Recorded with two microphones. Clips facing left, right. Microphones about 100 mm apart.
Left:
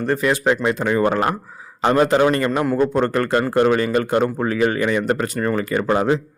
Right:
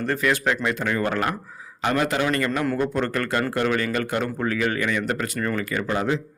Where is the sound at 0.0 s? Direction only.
25° left (ahead or behind).